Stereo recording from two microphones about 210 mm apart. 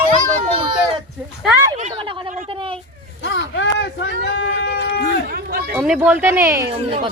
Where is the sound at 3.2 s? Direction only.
60° left (ahead or behind).